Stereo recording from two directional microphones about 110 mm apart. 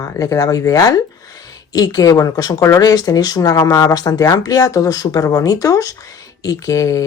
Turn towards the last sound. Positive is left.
turn(degrees=30)  # may be behind; listen again after turning